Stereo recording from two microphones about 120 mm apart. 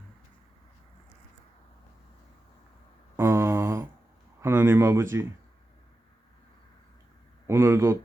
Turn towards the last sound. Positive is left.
turn(degrees=-25)  # may be behind; listen again after turning